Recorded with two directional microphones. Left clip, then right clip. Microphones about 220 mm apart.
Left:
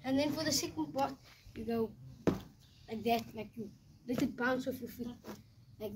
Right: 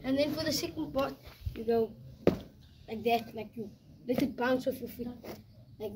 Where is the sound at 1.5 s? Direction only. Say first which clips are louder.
Right 7 dB; 30° right (ahead or behind).